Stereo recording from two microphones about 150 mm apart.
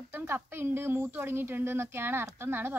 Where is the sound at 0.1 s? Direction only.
15° right (ahead or behind).